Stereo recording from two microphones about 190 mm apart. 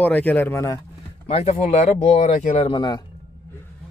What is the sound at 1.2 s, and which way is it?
Speech, 35° left (ahead or behind).